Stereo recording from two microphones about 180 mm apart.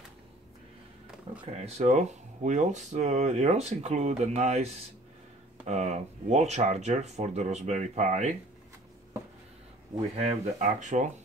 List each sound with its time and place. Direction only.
1.4 s speech: 35° right (ahead or behind)
5.7 s speech: 40° right (ahead or behind)
10.1 s speech: 35° right (ahead or behind)